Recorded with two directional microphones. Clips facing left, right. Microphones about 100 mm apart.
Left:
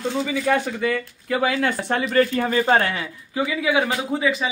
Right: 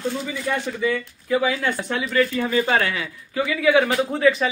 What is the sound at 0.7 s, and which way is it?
Speech, 55° left (ahead or behind).